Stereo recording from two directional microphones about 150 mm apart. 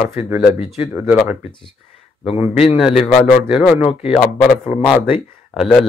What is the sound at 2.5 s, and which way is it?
Speech, 45° left (ahead or behind).